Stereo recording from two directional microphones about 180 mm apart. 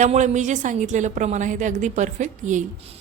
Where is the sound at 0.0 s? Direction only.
40° right (ahead or behind).